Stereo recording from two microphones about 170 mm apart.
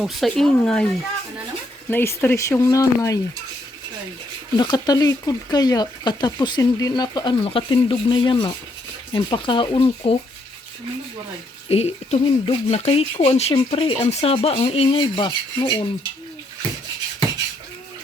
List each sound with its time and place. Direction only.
0.0 s speech: centre (ahead or behind)
1.9 s speech: 15° left (ahead or behind)
4.5 s speech: 25° left (ahead or behind)
11.7 s speech: 35° left (ahead or behind)